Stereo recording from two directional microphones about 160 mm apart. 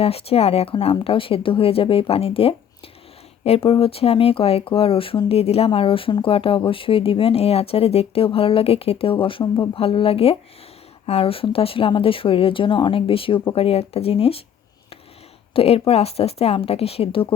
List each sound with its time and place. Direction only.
0.0 s speech: 40° left (ahead or behind)
15.5 s speech: 40° left (ahead or behind)